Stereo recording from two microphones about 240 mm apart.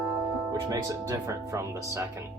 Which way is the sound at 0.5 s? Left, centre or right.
Centre.